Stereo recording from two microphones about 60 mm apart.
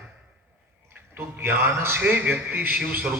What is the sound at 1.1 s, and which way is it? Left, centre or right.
A man's voice, right.